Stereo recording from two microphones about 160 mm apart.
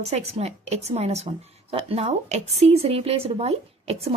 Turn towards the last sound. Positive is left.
turn(degrees=-40)  # may be behind; listen again after turning